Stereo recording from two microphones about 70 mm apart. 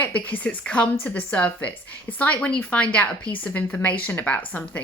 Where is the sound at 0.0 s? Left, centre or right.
Left.